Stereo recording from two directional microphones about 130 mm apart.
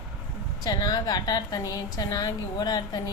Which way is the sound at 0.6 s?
30° left (ahead or behind).